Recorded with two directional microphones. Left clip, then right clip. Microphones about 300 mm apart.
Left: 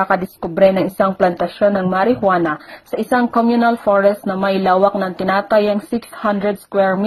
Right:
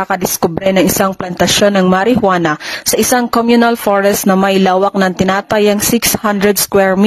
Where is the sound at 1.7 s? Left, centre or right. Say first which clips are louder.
Right 4 dB; right.